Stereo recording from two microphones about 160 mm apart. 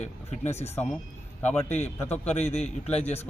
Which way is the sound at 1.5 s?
45° left (ahead or behind).